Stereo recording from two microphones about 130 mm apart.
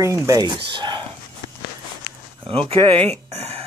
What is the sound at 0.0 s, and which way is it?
Speech, 25° right (ahead or behind).